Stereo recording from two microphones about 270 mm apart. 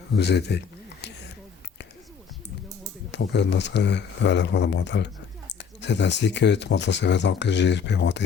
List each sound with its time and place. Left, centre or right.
0.2 s speech: left
3.1 s speech: left